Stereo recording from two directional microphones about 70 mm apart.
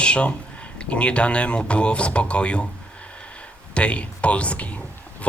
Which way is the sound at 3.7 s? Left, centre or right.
Centre.